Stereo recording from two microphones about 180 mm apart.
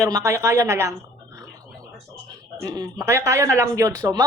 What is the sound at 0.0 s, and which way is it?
Speech, 15° right (ahead or behind).